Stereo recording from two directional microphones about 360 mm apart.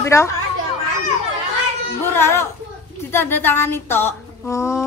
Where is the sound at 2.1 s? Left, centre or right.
Centre.